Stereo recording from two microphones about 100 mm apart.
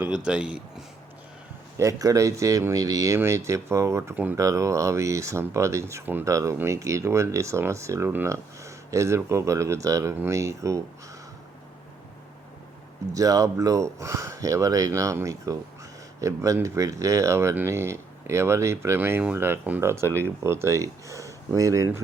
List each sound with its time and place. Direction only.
0.3 s speech: 10° right (ahead or behind)
1.8 s speech: 35° right (ahead or behind)
4.1 s speech: 15° right (ahead or behind)
4.4 s speech: 30° right (ahead or behind)
13.1 s speech: 35° right (ahead or behind)